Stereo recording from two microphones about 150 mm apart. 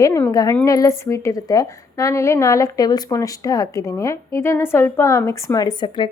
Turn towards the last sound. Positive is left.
turn(degrees=35)  # may be behind; listen again after turning